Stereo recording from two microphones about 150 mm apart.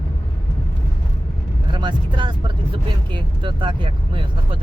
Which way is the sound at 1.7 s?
30° right (ahead or behind).